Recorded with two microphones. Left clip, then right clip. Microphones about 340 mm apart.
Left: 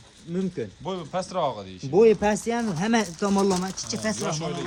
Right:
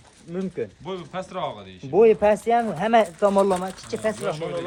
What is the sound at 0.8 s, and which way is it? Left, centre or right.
Speech, centre.